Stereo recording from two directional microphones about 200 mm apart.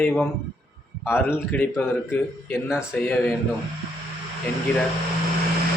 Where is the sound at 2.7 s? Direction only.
5° right (ahead or behind).